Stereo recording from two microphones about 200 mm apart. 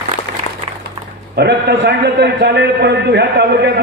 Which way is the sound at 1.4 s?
55° right (ahead or behind).